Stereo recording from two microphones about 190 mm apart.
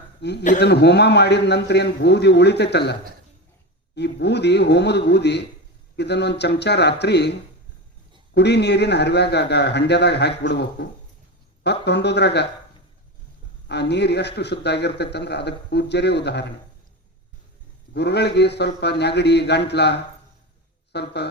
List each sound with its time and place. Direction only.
0.2 s speech: 60° left (ahead or behind)
3.9 s speech: 60° left (ahead or behind)
13.7 s speech: 60° left (ahead or behind)
17.9 s speech: 60° left (ahead or behind)